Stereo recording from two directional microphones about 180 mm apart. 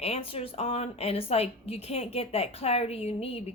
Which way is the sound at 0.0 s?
35° left (ahead or behind).